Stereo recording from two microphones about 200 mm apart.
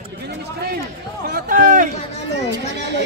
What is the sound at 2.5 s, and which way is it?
Speech, 60° right (ahead or behind).